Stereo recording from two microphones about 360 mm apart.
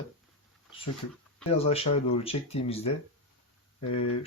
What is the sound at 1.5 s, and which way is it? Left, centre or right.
Speech, centre.